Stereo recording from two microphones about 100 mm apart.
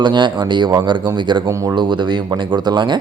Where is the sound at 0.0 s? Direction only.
45° right (ahead or behind).